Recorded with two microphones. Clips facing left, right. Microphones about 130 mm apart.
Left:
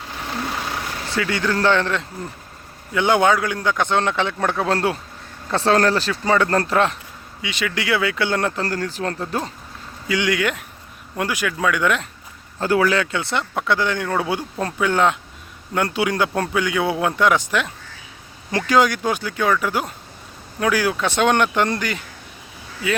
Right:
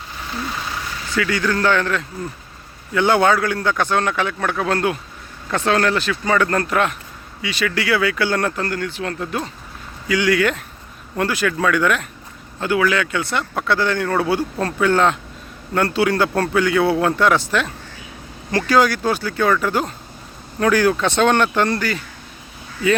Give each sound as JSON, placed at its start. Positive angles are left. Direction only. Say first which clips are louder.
{"t": 0.1, "sound": "vehicle", "louder": "left 1 dB", "side_deg": 65}
{"t": 1.0, "sound": "speech", "louder": "right 2 dB", "side_deg": 30}
{"t": 8.6, "sound": "speech", "louder": "even", "side_deg": 35}
{"t": 10.1, "sound": "speech", "louder": "right 3 dB", "side_deg": 20}
{"t": 12.5, "sound": "speech", "louder": "even", "side_deg": 35}